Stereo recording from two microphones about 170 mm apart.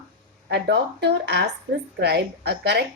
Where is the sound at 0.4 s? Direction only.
85° right.